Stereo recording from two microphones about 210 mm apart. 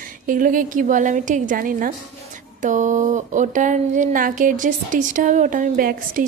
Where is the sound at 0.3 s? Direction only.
40° right (ahead or behind).